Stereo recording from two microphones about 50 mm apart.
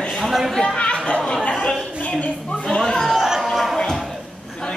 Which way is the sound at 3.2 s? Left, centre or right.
Centre.